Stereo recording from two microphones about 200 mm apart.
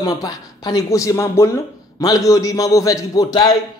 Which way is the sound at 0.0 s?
20° left (ahead or behind).